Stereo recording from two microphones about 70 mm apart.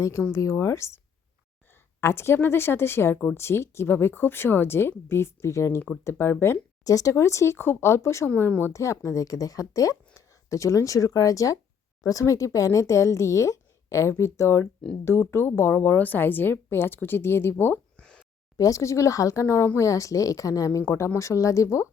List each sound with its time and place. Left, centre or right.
0.0 s a woman's voice: left
2.0 s a woman's voice: left
6.8 s speech: left
8.4 s a woman's voice: left
8.7 s a woman's voice: left
17.9 s a sound: centre
18.5 s speech: left